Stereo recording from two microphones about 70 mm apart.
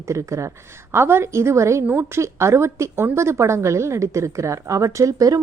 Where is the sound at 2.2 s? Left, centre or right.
Right.